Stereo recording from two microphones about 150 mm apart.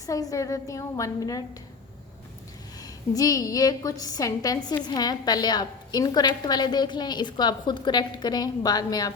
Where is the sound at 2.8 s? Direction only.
25° left (ahead or behind).